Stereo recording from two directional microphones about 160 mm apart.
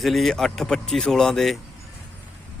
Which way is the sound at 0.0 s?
Centre (ahead or behind).